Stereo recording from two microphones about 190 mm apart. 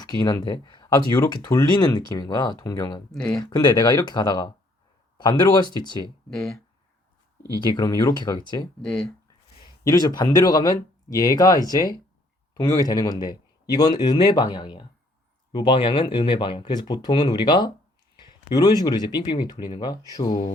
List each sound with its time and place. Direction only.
0.0 s speech: 20° left (ahead or behind)
3.1 s speech: 5° left (ahead or behind)
3.3 s speech: 20° left (ahead or behind)
6.3 s speech: centre (ahead or behind)
7.8 s speech: 20° left (ahead or behind)
8.8 s speech: 5° left (ahead or behind)
9.8 s speech: 20° left (ahead or behind)